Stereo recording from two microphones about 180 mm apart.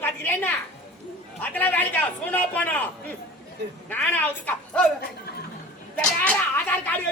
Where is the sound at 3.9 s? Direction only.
10° left (ahead or behind).